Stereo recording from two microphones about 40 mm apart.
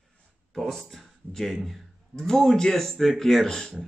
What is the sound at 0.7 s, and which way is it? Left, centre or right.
Speech, centre.